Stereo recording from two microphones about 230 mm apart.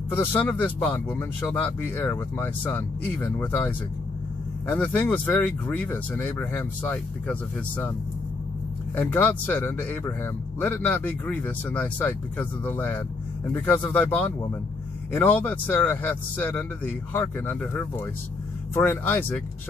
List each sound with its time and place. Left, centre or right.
0.1 s speech: centre
8.9 s speech: centre